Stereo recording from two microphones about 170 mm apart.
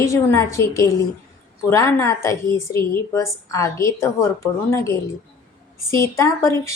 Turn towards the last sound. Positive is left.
turn(degrees=15)  # may be behind; listen again after turning